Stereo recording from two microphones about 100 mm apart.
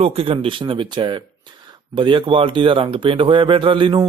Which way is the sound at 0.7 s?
55° right (ahead or behind).